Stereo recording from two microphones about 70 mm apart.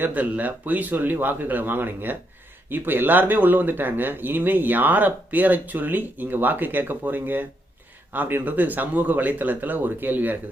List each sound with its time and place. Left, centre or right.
0.0 s speech: right